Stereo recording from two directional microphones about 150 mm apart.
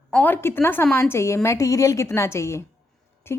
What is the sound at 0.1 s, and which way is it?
A woman's voice, 10° left (ahead or behind).